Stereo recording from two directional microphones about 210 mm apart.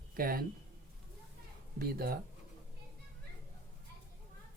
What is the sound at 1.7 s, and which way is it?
Speech, 45° right (ahead or behind).